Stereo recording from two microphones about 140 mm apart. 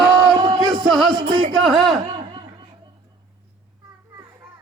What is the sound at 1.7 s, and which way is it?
Speech, centre (ahead or behind).